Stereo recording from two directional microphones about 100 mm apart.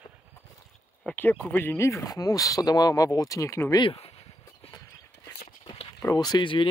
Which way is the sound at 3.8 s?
70° left (ahead or behind).